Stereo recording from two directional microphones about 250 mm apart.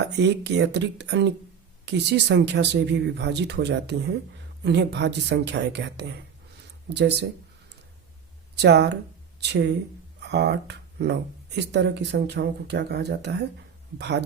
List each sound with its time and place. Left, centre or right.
0.0 s speech: right
8.6 s speech: right
10.2 s speech: right